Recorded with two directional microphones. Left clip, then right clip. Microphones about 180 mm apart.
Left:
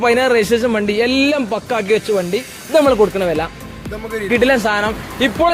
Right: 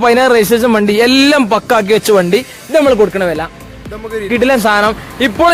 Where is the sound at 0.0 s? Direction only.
35° right (ahead or behind).